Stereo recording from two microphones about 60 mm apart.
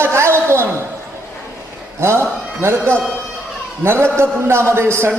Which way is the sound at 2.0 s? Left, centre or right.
Right.